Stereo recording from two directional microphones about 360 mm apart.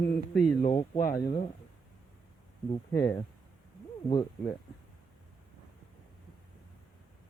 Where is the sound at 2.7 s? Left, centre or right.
Centre.